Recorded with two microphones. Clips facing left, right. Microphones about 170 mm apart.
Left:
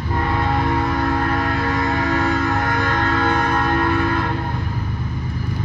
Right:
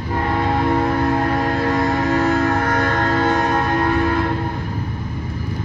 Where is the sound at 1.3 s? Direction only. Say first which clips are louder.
Right 2 dB; 35° right (ahead or behind).